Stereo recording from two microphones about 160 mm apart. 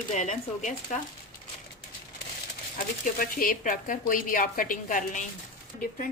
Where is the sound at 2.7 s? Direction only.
60° left (ahead or behind).